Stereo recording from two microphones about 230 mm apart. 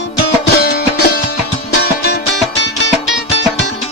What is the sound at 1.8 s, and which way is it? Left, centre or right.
Music, left.